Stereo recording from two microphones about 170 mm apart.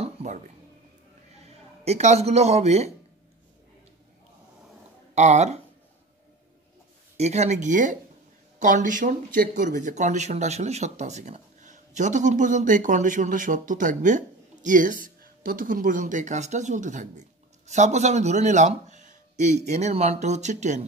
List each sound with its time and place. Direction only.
0.0 s a sound: 40° right (ahead or behind)
1.4 s speech: 40° right (ahead or behind)
5.1 s speech: 40° right (ahead or behind)
7.2 s speech: 40° right (ahead or behind)